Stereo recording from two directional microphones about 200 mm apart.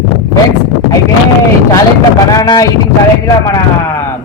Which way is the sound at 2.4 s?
20° left (ahead or behind).